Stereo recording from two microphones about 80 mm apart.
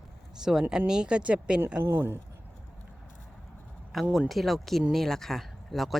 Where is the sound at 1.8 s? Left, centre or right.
Right.